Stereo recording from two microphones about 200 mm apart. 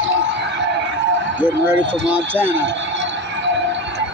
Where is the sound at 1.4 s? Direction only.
10° right (ahead or behind).